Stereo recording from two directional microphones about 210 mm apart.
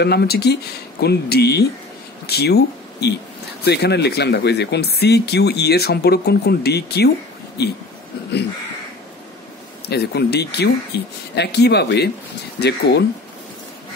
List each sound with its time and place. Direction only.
0.0 s speech: 50° left (ahead or behind)
9.8 s speech: 50° left (ahead or behind)